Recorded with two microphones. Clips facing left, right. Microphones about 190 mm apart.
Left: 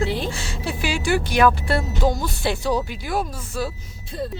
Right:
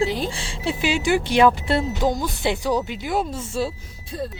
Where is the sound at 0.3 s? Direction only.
30° right (ahead or behind).